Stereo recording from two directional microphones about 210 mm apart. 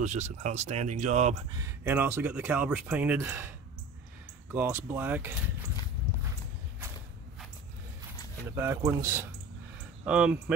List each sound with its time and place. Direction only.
0.0 s speech: 35° right (ahead or behind)
1.6 s speech: 10° right (ahead or behind)
8.5 s speech: 10° right (ahead or behind)